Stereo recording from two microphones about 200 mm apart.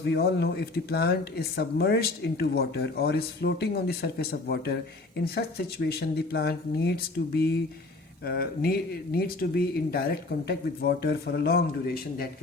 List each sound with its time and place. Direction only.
0.0 s speech: 55° left (ahead or behind)